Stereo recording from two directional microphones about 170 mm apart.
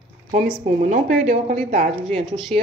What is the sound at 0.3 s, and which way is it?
Speech, 50° right (ahead or behind).